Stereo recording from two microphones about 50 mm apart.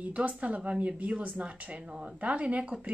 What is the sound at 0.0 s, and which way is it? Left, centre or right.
Speech, right.